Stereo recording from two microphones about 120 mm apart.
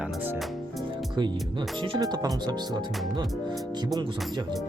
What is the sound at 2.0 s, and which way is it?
Speech, 30° right (ahead or behind).